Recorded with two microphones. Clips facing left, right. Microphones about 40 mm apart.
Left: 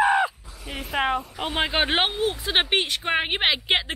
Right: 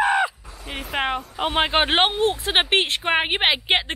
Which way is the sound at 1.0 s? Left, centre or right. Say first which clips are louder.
Right 3 dB; right.